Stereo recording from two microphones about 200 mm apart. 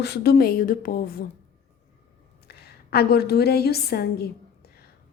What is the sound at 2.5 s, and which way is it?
A woman's voice, 55° left (ahead or behind).